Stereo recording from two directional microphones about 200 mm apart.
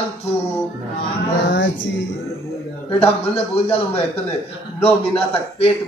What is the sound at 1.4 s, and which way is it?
Speech, 65° left (ahead or behind).